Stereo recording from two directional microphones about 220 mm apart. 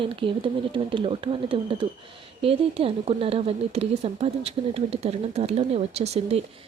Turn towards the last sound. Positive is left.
turn(degrees=-30)  # may be behind; listen again after turning